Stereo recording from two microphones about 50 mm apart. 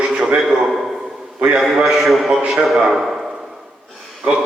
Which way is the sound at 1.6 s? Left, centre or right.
Centre.